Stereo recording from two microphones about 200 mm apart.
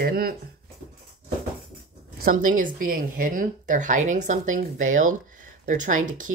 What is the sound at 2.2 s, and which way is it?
Speech, 40° right (ahead or behind).